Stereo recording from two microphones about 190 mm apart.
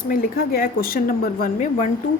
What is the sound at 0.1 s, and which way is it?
A woman's voice, 50° left (ahead or behind).